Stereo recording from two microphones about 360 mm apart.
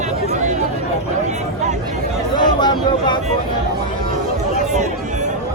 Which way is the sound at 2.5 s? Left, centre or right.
Centre.